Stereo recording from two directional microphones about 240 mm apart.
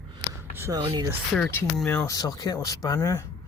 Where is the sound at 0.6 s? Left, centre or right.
Centre.